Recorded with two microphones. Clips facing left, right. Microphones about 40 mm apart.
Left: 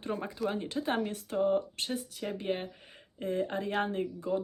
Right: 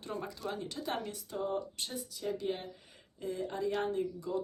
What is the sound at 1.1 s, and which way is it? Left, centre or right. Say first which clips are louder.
Speech: left 7 dB; left.